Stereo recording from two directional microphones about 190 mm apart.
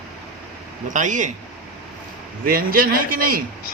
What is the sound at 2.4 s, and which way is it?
Speech, 50° right (ahead or behind).